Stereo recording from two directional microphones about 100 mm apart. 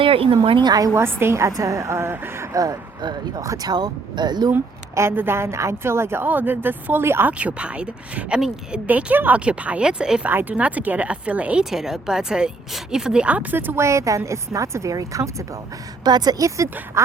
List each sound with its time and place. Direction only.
0.0 s speech: 60° right (ahead or behind)
0.6 s a woman's voice: 40° right (ahead or behind)
0.9 s a woman's voice: 25° right (ahead or behind)
2.6 s speech: 40° right (ahead or behind)
4.5 s a woman's voice: 25° right (ahead or behind)
16.0 s a woman's voice: 45° right (ahead or behind)
16.6 s a woman's voice: 20° right (ahead or behind)